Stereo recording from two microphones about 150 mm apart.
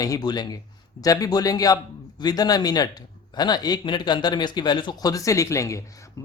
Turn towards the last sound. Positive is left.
turn(degrees=20)  # may be behind; listen again after turning